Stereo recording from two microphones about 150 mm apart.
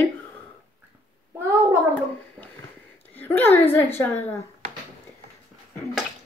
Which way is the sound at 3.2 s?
15° left (ahead or behind).